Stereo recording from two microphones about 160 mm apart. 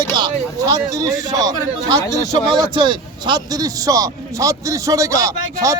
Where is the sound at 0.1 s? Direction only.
25° right (ahead or behind).